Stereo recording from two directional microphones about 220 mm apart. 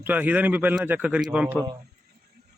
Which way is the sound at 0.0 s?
10° right (ahead or behind).